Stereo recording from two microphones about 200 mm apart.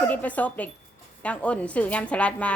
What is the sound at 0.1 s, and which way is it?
A woman's voice, 5° left (ahead or behind).